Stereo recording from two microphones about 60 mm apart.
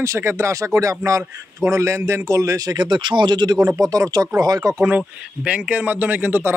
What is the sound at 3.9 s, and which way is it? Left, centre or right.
Speech, right.